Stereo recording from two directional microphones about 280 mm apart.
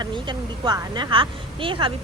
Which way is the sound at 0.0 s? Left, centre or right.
Centre.